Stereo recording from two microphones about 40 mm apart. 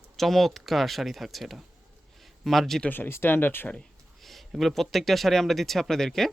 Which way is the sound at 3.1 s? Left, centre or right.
Left.